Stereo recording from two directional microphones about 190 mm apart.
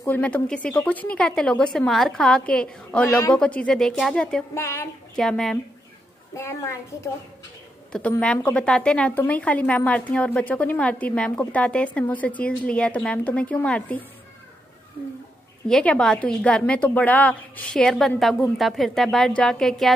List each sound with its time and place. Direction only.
0.0 s a woman's voice: 10° left (ahead or behind)
6.3 s speech: 15° left (ahead or behind)
7.9 s speech: 5° left (ahead or behind)
15.7 s a woman's voice: 5° left (ahead or behind)